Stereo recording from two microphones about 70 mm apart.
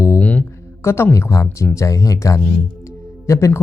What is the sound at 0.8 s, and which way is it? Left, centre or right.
Speech, left.